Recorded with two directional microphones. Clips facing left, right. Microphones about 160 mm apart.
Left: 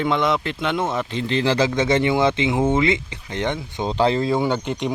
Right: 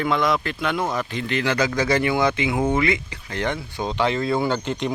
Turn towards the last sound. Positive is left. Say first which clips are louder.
# left 1 dB
turn(degrees=10)  # may be behind; listen again after turning